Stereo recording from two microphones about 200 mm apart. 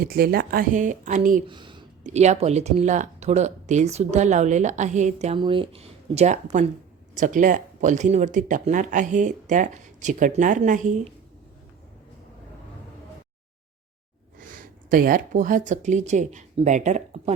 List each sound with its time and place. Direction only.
0.0 s speech: 50° right (ahead or behind)
1.5 s speech: 25° right (ahead or behind)
2.0 s speech: 35° right (ahead or behind)
5.4 s speech: 25° right (ahead or behind)
14.3 s speech: 45° right (ahead or behind)